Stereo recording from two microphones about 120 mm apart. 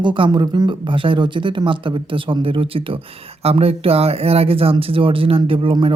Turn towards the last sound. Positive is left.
turn(degrees=-45)  # may be behind; listen again after turning